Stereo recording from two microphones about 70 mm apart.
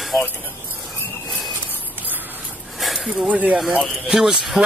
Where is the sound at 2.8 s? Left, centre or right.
Centre.